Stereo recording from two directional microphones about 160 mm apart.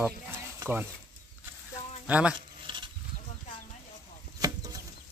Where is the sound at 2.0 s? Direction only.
5° right (ahead or behind).